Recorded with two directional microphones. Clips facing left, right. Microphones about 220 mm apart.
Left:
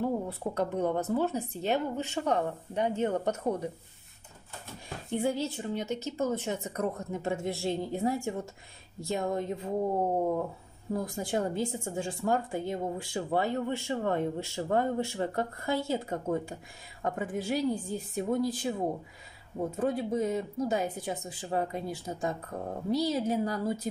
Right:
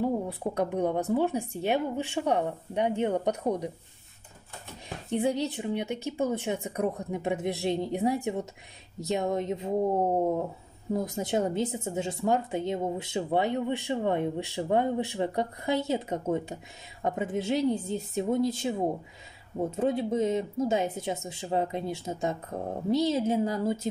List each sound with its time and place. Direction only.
0.0 s speech: 15° right (ahead or behind)
4.8 s speech: 20° right (ahead or behind)
10.9 s speech: 20° right (ahead or behind)